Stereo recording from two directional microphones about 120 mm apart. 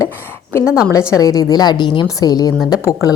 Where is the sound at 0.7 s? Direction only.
5° right (ahead or behind).